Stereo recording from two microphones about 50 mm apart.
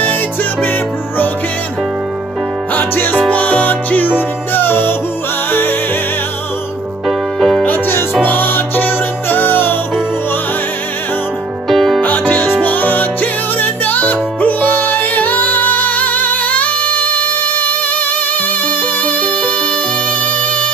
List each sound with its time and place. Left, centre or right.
2.8 s music: left
3.3 s music: left
4.6 s music: left
7.1 s music: centre
7.6 s music: left
11.7 s music: centre
12.0 s music: left